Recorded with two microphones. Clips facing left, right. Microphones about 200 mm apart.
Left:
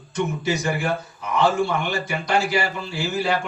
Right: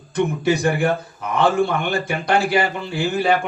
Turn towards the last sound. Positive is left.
turn(degrees=-55)  # may be behind; listen again after turning